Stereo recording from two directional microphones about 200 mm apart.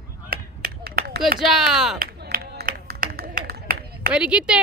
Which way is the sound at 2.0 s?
50° right (ahead or behind).